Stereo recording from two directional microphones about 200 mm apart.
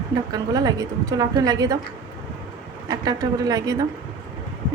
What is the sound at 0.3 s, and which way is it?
A woman's voice, 20° right (ahead or behind).